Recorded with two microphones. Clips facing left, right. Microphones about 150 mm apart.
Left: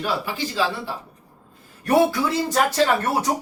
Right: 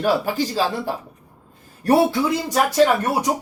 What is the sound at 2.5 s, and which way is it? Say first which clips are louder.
Speech: right 4 dB; 15° right (ahead or behind).